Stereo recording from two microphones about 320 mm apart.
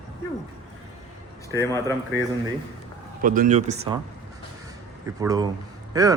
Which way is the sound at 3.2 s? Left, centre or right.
Right.